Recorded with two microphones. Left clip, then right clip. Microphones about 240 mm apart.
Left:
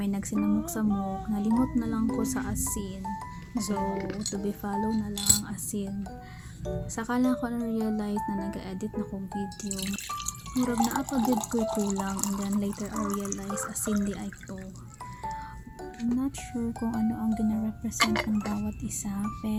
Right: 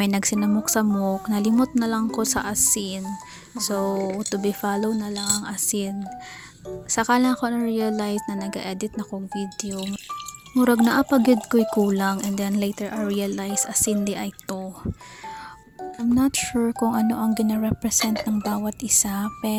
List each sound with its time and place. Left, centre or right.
0.0 s speech: right
6.9 s speech: right
16.1 s a woman's voice: right